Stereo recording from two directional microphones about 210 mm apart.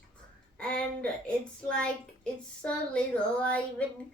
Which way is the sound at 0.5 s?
5° left (ahead or behind).